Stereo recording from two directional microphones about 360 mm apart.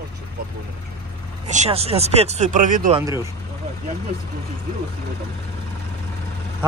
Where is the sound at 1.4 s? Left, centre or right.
Centre.